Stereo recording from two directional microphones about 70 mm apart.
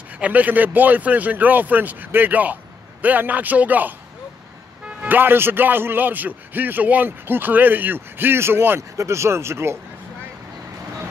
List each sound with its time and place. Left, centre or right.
0.2 s speech: right